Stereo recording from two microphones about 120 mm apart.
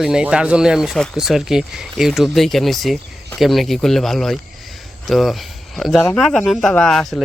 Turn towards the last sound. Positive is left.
turn(degrees=5)  # may be behind; listen again after turning